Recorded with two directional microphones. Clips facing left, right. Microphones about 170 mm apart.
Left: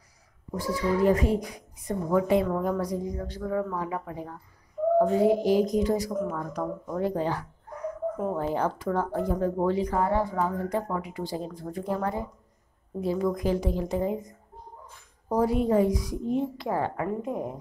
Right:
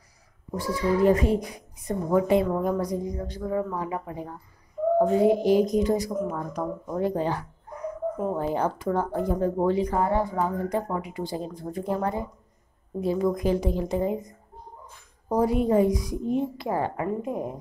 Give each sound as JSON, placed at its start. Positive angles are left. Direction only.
{"t": 0.6, "sound": "a woman's voice", "side_deg": -25}